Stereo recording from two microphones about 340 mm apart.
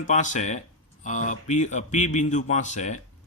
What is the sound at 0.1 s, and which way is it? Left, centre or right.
Speech, left.